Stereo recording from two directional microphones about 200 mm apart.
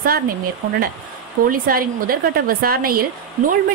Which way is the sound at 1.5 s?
45° right (ahead or behind).